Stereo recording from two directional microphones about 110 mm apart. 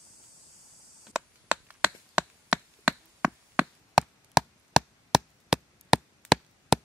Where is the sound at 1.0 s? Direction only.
10° right (ahead or behind).